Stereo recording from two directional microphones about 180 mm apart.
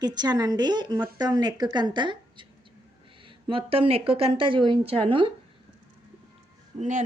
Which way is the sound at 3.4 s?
30° right (ahead or behind).